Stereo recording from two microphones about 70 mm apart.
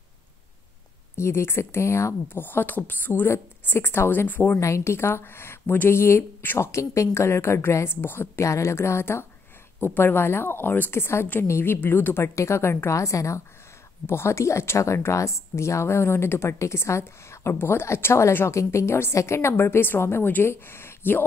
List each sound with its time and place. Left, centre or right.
1.1 s speech: left
2.2 s speech: left
14.0 s speech: left